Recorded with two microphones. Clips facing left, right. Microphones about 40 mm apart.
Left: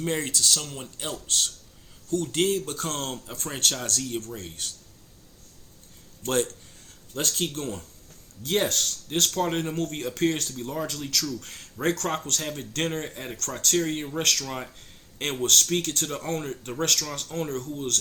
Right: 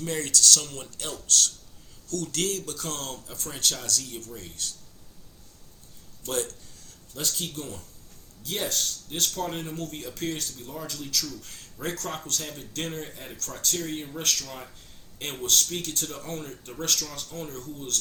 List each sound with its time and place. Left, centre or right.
0.0 s speech: left
2.7 s speech: left
6.2 s speech: left